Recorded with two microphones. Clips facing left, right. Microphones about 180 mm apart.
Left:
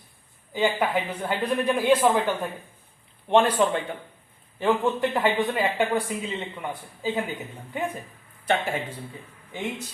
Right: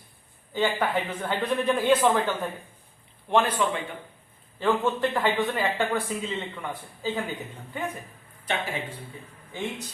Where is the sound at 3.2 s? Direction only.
30° left (ahead or behind).